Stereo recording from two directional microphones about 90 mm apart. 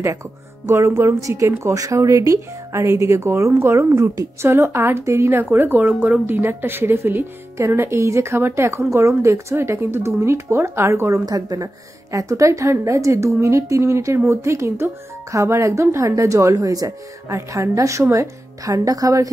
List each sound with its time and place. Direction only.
0.7 s speech: 30° right (ahead or behind)
11.2 s speech: 45° right (ahead or behind)